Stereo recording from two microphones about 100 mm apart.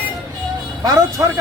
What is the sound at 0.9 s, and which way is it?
Speech, 35° right (ahead or behind).